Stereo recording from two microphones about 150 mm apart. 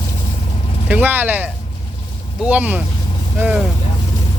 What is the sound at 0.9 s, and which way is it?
Speech, 10° right (ahead or behind).